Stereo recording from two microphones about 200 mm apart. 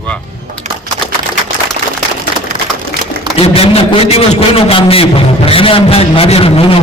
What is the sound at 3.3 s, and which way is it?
A man's voice, 30° left (ahead or behind).